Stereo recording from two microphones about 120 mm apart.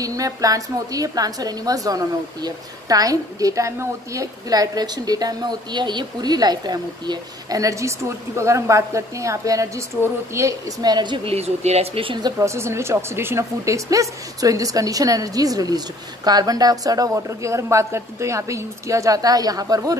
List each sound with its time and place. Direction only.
0.0 s a woman's voice: 30° right (ahead or behind)
11.2 s speech: 60° right (ahead or behind); by 12.4 s 40° right (ahead or behind)
12.4 s a woman's voice: 20° right (ahead or behind)